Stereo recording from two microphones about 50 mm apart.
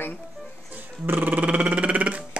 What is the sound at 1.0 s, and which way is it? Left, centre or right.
Music, right.